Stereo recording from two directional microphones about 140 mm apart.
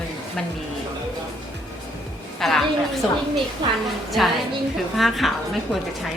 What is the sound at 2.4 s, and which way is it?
Speech, centre (ahead or behind).